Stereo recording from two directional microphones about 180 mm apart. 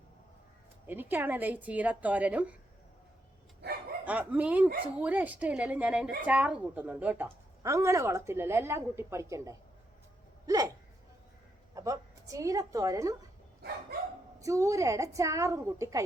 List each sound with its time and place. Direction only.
0.9 s a woman's voice: 10° right (ahead or behind)
4.0 s a woman's voice: 10° right (ahead or behind)
11.7 s a woman's voice: 20° right (ahead or behind)
14.3 s a woman's voice: 15° right (ahead or behind)